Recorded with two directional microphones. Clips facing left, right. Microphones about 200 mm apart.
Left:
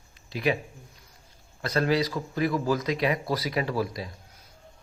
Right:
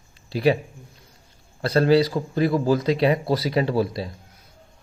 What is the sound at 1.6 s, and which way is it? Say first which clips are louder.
Speech: right 7 dB; 30° right (ahead or behind).